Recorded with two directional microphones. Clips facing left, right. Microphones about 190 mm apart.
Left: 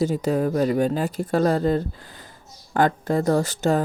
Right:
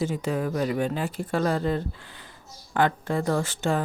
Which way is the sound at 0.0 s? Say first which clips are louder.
Left 5 dB; 40° left (ahead or behind).